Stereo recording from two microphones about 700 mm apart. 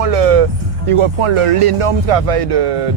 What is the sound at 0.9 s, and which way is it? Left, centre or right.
Speech, right.